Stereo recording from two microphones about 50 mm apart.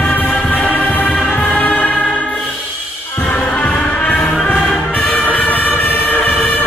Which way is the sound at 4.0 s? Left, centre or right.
Left.